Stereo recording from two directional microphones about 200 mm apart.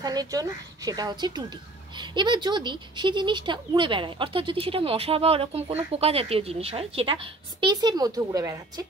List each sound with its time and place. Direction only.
0.0 s speech: 20° right (ahead or behind)